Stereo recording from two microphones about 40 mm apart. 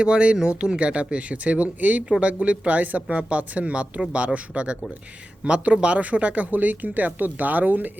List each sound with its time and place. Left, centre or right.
0.0 s speech: right